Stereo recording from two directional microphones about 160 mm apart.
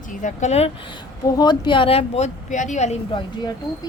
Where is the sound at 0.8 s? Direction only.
25° left (ahead or behind); by 3.0 s 45° left (ahead or behind).